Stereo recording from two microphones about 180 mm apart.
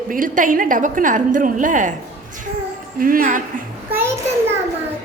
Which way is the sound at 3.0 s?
50° right (ahead or behind).